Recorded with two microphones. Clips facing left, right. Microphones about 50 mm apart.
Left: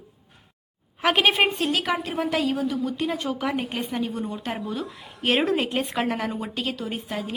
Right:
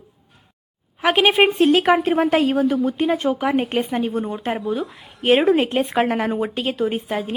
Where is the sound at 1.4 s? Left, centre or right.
Right.